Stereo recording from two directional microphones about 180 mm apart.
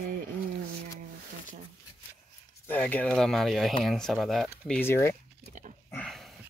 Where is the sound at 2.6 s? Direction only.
10° left (ahead or behind).